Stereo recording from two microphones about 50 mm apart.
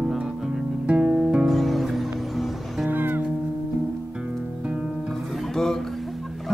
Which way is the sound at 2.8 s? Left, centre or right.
Right.